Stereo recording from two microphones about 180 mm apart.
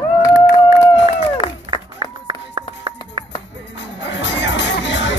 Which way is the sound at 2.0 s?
25° right (ahead or behind).